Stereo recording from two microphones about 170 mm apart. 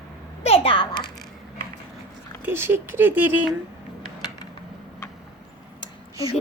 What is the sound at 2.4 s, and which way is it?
Speech, 15° right (ahead or behind).